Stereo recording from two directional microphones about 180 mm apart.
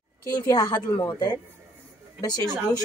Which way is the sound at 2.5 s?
15° right (ahead or behind).